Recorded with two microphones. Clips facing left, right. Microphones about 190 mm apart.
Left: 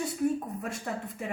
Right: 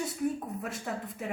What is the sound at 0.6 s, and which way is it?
Speech, centre (ahead or behind).